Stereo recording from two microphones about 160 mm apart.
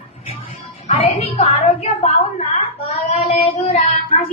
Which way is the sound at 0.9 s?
40° left (ahead or behind).